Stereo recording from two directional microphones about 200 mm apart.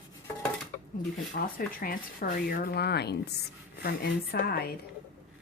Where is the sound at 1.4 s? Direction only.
45° left (ahead or behind).